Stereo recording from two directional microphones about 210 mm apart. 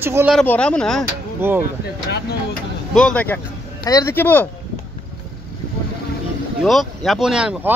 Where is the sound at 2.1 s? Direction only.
50° left (ahead or behind).